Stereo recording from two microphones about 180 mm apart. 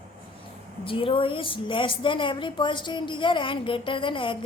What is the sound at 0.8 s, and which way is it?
A woman's voice, 30° left (ahead or behind).